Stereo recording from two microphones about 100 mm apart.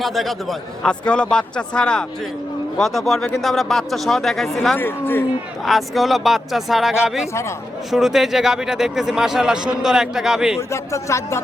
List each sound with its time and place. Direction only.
0.0 s speech: centre (ahead or behind)
4.8 s speech: 20° left (ahead or behind)
5.6 s speech: centre (ahead or behind)
10.7 s speech: 30° left (ahead or behind)